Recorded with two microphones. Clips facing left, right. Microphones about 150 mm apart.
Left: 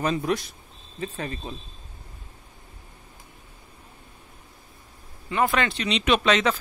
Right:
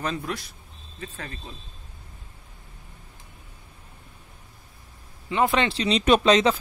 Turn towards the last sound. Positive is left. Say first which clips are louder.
# right 3 dB
turn(degrees=-30)  # may be behind; listen again after turning